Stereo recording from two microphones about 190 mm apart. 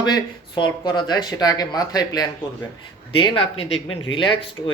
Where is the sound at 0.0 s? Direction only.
25° left (ahead or behind).